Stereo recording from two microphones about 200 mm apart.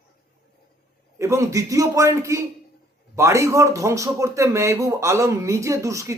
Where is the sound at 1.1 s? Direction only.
15° right (ahead or behind).